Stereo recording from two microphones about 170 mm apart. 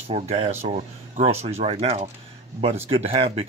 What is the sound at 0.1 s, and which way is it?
Speech, 35° right (ahead or behind).